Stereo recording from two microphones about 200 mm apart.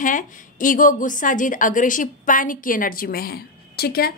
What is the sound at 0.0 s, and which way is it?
A woman's voice, 40° left (ahead or behind).